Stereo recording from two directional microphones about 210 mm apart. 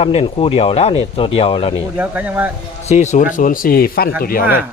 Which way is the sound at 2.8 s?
35° left (ahead or behind).